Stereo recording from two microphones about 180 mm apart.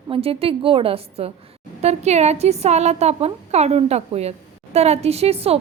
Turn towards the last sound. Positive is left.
turn(degrees=-35)  # may be behind; listen again after turning